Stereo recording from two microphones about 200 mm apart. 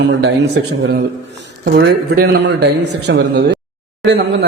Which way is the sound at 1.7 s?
55° right (ahead or behind).